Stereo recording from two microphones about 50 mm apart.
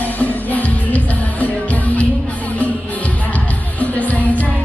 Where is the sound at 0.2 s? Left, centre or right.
Left.